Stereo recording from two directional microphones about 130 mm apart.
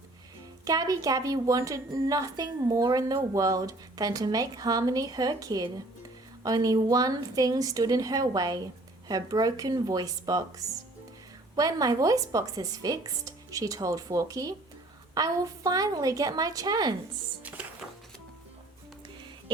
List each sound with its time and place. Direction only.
0.6 s speech: 25° right (ahead or behind)
11.5 s speech: 30° right (ahead or behind)
19.5 s speech: 40° right (ahead or behind)